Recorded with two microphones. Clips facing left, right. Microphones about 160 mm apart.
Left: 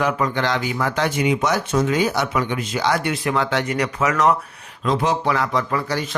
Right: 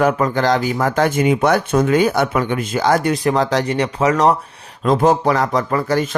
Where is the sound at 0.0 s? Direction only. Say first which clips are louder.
Right 5 dB; 45° right (ahead or behind).